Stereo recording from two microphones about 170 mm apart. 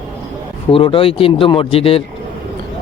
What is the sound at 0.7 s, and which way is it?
Speech, 30° left (ahead or behind).